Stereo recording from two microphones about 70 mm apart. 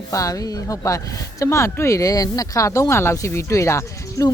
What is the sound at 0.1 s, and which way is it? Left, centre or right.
Speech, left.